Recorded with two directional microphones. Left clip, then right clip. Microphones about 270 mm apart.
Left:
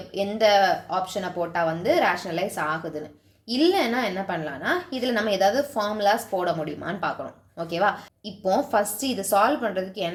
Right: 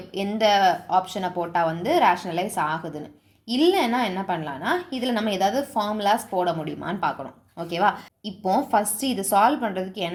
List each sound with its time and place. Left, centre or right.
0.1 s a woman's voice: centre